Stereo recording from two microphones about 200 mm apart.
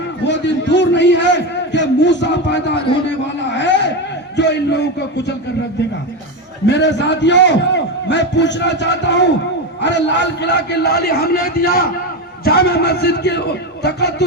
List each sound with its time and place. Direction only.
0.3 s a man's voice: 65° left (ahead or behind)
4.4 s music: 60° left (ahead or behind)
6.7 s a man's voice: 60° left (ahead or behind)